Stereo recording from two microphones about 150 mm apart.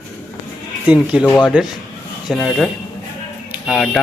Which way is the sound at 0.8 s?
5° right (ahead or behind).